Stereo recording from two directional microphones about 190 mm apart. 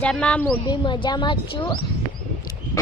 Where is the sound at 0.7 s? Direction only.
25° left (ahead or behind).